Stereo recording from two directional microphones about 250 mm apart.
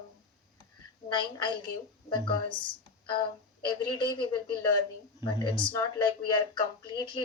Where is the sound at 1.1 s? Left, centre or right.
Centre.